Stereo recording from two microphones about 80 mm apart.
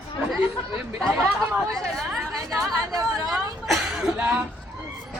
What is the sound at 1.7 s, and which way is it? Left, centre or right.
Speech, centre.